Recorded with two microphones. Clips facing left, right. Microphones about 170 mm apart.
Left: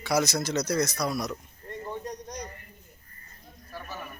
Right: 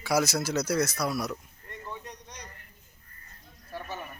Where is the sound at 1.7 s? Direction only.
40° left (ahead or behind).